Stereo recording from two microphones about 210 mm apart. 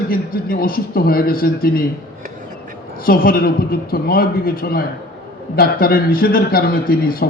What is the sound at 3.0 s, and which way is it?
A man's voice, 45° left (ahead or behind).